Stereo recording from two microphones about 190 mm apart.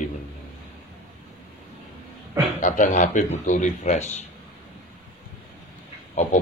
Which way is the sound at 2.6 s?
45° left (ahead or behind).